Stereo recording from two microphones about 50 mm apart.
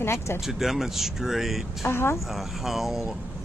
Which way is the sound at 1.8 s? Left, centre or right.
Left.